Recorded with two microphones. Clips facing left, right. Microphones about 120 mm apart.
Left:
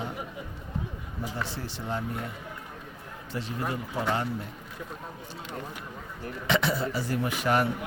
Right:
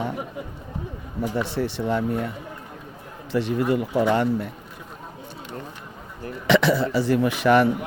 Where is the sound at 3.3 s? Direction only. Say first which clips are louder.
Right 11 dB; 70° right (ahead or behind).